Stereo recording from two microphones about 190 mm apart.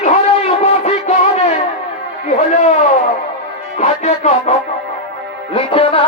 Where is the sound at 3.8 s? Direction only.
35° left (ahead or behind).